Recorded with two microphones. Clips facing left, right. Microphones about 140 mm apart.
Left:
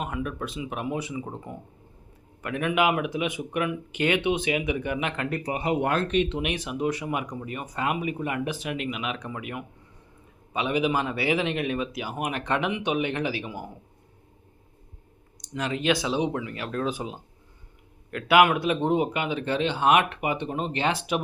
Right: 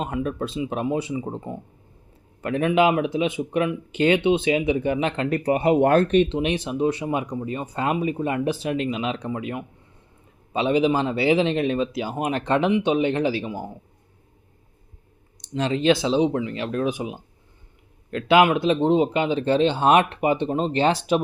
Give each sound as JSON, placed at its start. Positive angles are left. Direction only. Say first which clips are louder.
{"t": 0.0, "sound": "speech", "louder": "right 5 dB", "side_deg": -30}
{"t": 5.5, "sound": "speech", "louder": "right 9 dB", "side_deg": -50}
{"t": 6.2, "sound": "speech", "louder": "right 5 dB", "side_deg": -30}
{"t": 15.4, "sound": "speech", "louder": "right 6 dB", "side_deg": -30}